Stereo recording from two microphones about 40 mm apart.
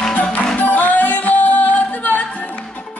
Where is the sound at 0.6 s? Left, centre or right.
Left.